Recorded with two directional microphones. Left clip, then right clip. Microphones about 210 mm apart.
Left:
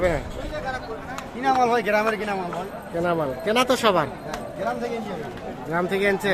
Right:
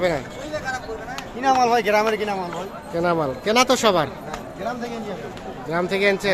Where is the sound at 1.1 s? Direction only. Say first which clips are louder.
Right 2 dB; 35° right (ahead or behind).